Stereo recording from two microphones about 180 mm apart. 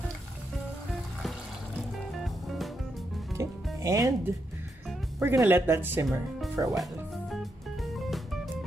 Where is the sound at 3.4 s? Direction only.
15° right (ahead or behind).